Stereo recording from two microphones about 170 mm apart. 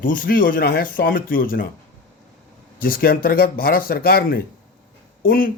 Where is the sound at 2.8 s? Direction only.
60° left (ahead or behind).